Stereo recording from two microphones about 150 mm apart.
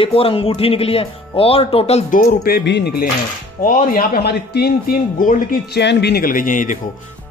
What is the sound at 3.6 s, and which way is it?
Speech, 70° left (ahead or behind).